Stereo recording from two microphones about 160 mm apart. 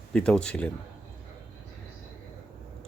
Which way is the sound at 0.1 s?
5° left (ahead or behind).